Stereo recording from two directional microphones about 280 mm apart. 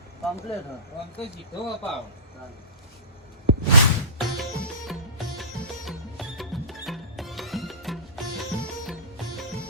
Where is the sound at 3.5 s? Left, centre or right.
Right.